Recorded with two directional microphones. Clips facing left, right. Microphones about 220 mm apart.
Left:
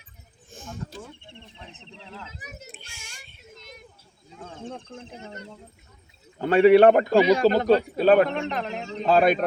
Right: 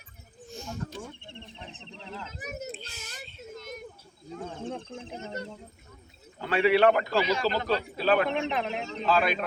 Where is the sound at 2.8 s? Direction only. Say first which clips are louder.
Right 5 dB; 15° left (ahead or behind).